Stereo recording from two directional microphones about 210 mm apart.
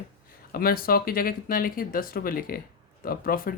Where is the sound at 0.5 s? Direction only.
45° left (ahead or behind).